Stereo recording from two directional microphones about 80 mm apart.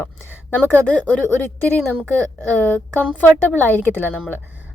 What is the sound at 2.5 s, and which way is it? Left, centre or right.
A woman's voice, centre.